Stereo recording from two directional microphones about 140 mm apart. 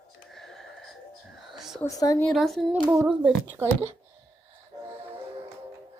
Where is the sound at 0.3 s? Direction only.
Centre (ahead or behind).